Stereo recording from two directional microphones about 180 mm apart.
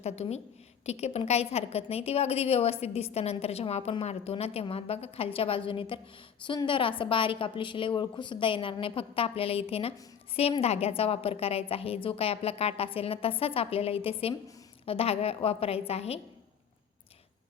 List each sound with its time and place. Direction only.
0.0 s a woman's voice: 35° left (ahead or behind)